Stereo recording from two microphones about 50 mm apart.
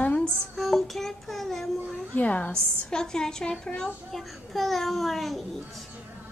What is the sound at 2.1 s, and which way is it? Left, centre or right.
Speech, left.